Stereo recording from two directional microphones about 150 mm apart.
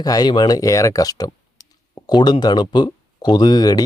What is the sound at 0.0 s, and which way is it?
Speech, 25° left (ahead or behind).